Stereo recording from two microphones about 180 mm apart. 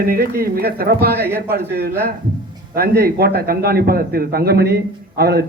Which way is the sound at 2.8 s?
60° right (ahead or behind).